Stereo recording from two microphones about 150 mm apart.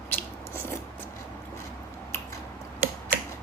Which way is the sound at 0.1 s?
15° left (ahead or behind).